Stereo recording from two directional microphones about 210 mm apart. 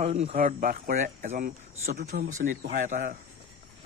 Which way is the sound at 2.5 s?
35° right (ahead or behind).